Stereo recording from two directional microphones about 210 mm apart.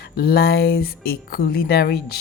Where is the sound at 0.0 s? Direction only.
50° left (ahead or behind).